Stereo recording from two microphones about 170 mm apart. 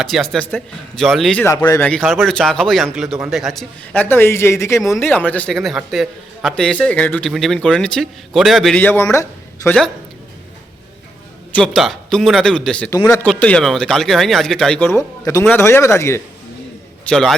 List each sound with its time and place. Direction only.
0.0 s a man's voice: centre (ahead or behind)
1.9 s a man's voice: 5° left (ahead or behind)
11.5 s a man's voice: 5° left (ahead or behind)
12.9 s speech: 15° left (ahead or behind)
13.2 s a man's voice: 5° left (ahead or behind)
17.1 s a man's voice: 5° left (ahead or behind)